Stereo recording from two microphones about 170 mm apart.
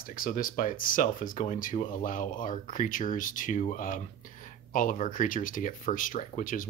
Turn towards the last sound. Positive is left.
turn(degrees=50)  # may be behind; listen again after turning